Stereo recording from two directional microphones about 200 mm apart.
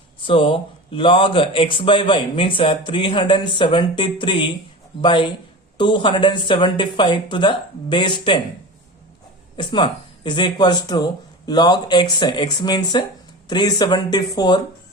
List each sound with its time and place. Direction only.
0.2 s speech: 25° left (ahead or behind)
9.6 s speech: 25° left (ahead or behind)